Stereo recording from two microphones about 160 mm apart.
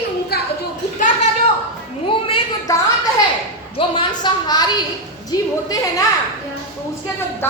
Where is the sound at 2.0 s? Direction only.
35° left (ahead or behind).